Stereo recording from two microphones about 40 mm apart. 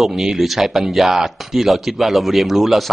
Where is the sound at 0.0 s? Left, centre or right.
Centre.